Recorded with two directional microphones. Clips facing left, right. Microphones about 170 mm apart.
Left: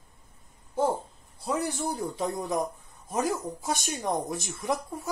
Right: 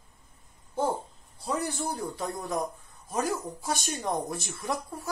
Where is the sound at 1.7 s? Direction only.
15° left (ahead or behind).